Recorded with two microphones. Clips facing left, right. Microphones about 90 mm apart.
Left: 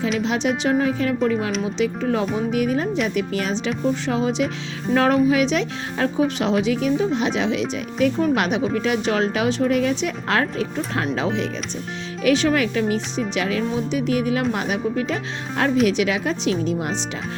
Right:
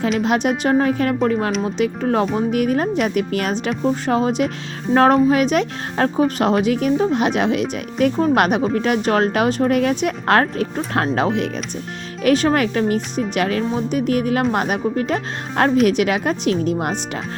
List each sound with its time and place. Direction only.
0.2 s speech: 50° right (ahead or behind)